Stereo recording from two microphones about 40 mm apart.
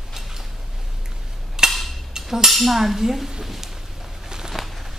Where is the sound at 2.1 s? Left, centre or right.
Centre.